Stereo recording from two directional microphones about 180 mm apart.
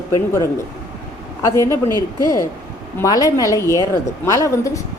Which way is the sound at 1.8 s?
20° right (ahead or behind).